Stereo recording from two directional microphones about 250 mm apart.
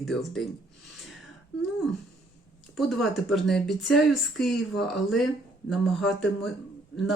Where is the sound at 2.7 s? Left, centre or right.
Centre.